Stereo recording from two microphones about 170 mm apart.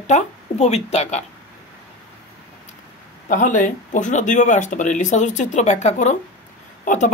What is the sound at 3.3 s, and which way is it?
Speech, 50° left (ahead or behind).